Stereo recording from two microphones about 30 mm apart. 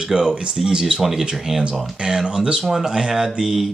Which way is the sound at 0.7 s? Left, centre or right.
Right.